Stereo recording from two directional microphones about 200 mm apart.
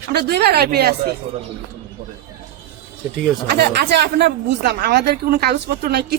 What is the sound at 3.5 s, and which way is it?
A woman's voice, 55° right (ahead or behind).